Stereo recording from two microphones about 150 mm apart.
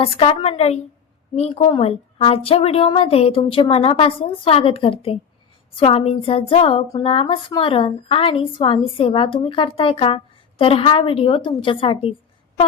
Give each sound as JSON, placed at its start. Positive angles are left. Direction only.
{"t": 0.0, "sound": "a woman's voice", "side_deg": 40}